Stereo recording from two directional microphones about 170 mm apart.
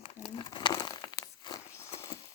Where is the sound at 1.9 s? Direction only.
35° left (ahead or behind).